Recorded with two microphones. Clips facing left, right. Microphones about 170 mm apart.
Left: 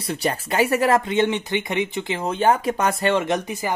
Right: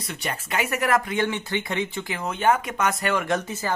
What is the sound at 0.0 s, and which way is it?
Speech, 35° left (ahead or behind).